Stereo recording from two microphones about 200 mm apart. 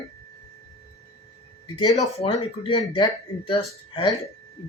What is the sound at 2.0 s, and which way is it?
Speech, 30° left (ahead or behind).